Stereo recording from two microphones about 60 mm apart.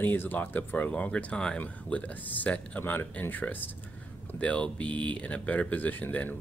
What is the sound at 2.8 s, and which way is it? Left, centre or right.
Speech, left.